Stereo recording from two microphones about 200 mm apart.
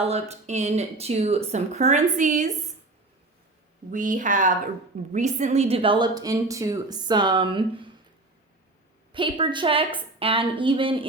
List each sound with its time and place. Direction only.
0.0 s speech: 30° right (ahead or behind)
3.9 s a woman's voice: 40° right (ahead or behind); by 7.9 s 25° right (ahead or behind)
9.1 s a woman's voice: 25° right (ahead or behind)